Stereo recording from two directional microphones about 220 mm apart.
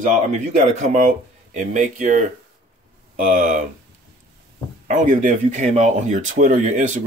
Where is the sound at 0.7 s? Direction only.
35° right (ahead or behind).